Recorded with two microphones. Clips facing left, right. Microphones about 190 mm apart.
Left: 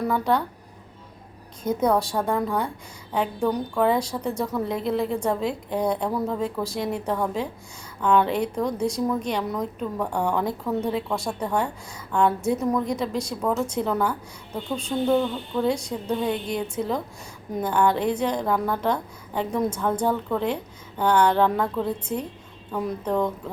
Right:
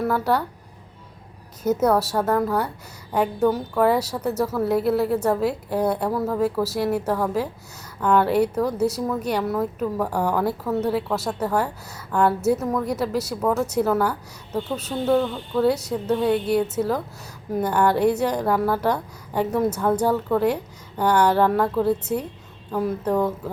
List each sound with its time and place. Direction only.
0.0 s speech: 5° right (ahead or behind)
1.8 s a woman's voice: 5° right (ahead or behind)